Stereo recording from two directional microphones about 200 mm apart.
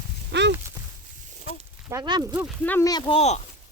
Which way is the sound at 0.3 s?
60° right (ahead or behind).